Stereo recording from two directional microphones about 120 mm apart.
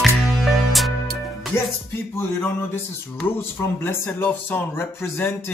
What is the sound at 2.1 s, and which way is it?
A man's voice, 20° left (ahead or behind).